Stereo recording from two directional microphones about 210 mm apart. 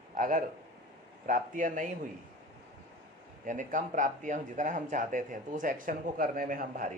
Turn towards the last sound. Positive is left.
turn(degrees=-40)  # may be behind; listen again after turning